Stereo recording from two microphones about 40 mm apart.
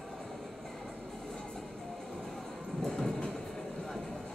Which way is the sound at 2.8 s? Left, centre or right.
Centre.